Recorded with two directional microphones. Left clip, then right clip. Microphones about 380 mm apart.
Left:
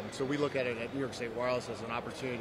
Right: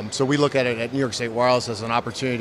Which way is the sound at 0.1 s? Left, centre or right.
Right.